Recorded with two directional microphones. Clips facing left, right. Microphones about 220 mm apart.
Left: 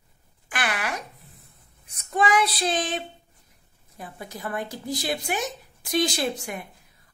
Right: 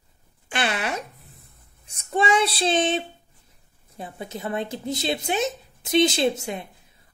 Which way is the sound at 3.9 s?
25° right (ahead or behind).